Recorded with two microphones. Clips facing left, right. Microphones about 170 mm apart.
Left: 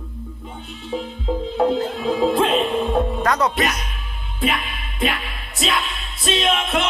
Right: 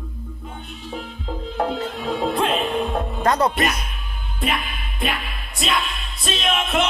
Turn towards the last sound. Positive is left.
turn(degrees=0)  # may be behind; listen again after turning